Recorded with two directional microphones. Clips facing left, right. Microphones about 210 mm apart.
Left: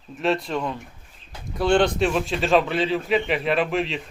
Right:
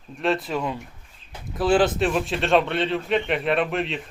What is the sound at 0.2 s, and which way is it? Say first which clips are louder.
A man's voice: even; centre (ahead or behind).